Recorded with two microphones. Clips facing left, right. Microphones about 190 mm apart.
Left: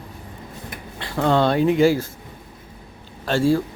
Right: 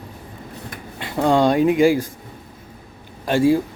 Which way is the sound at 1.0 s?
15° right (ahead or behind).